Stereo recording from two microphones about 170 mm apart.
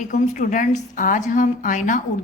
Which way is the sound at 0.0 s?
50° left (ahead or behind).